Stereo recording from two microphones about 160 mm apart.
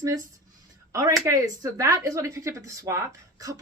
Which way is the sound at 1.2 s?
20° right (ahead or behind).